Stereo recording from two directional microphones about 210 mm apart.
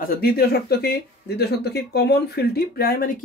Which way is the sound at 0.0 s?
45° left (ahead or behind).